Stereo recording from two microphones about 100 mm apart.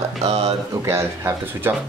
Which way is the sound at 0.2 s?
90° right.